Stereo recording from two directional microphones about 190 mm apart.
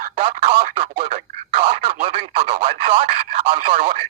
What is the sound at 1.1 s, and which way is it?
Radio, 30° right (ahead or behind).